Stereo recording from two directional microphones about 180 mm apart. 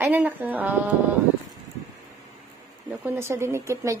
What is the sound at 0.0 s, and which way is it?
Speech, 10° right (ahead or behind).